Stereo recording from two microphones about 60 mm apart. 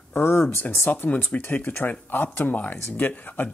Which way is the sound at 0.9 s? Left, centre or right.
Left.